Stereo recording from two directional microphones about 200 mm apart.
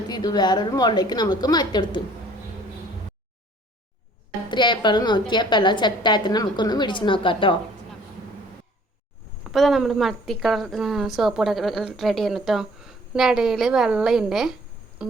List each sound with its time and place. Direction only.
0.1 s a woman's voice: 20° left (ahead or behind)
4.5 s a woman's voice: 20° left (ahead or behind)
9.5 s a woman's voice: centre (ahead or behind)